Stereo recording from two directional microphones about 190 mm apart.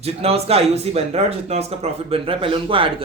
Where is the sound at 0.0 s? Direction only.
30° right (ahead or behind).